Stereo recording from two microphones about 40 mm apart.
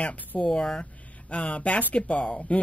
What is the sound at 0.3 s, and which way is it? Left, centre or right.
Speech, centre.